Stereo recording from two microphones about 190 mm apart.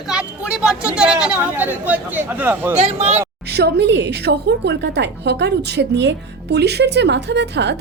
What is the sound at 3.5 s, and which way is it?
A woman's voice, 60° right (ahead or behind).